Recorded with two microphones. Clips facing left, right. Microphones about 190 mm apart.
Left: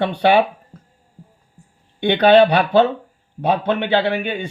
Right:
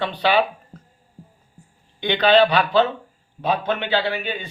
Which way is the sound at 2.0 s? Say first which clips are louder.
Left 4 dB; 55° left (ahead or behind).